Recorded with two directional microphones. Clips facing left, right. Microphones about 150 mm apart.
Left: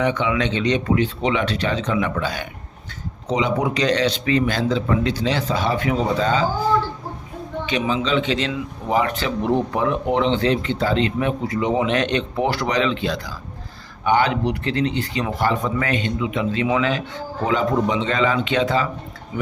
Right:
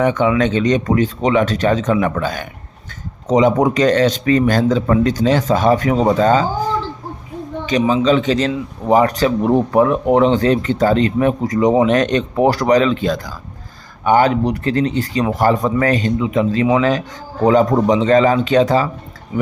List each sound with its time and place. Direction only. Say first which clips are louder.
0.0 s speech: right 6 dB; 45° right (ahead or behind)
7.7 s a man's voice: right 7 dB; 40° right (ahead or behind)